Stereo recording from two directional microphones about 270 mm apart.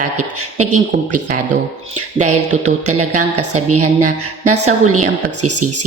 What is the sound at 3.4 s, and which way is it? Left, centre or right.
A woman's voice, right.